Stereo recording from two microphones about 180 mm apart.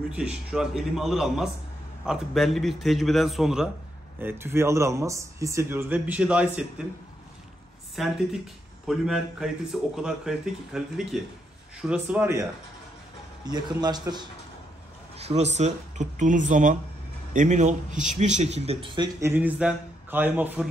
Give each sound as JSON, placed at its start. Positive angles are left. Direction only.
{"t": 0.1, "sound": "speech", "side_deg": -5}
{"t": 7.9, "sound": "speech", "side_deg": 0}
{"t": 13.5, "sound": "a man's voice", "side_deg": -20}
{"t": 15.1, "sound": "a man's voice", "side_deg": -35}